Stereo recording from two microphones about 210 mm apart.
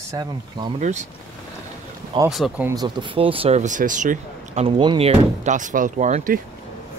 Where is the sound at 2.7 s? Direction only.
20° right (ahead or behind); by 6.4 s 35° right (ahead or behind).